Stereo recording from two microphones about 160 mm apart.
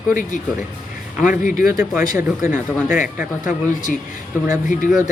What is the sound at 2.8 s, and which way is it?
Speech, 55° left (ahead or behind).